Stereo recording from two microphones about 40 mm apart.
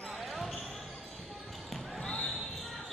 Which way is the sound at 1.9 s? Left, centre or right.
Centre.